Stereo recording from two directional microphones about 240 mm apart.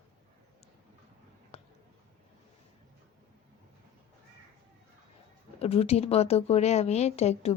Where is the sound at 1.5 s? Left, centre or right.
Left.